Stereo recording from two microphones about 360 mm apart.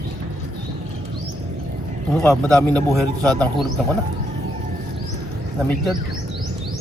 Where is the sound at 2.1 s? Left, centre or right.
Centre.